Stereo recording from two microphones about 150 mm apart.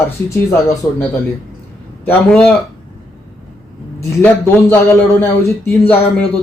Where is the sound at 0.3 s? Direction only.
20° left (ahead or behind).